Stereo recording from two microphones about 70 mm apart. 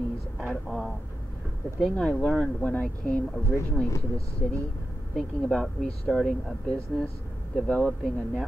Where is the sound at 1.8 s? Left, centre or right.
Centre.